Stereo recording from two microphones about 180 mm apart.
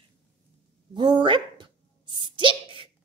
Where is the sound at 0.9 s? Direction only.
25° right (ahead or behind).